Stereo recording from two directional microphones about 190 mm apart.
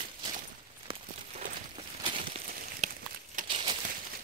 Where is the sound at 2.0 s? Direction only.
25° right (ahead or behind).